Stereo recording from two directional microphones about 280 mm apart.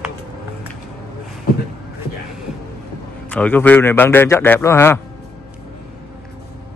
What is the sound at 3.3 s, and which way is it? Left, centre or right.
A man's voice, centre.